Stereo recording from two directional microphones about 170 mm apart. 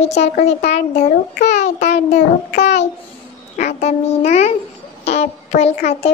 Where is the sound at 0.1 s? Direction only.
40° left (ahead or behind).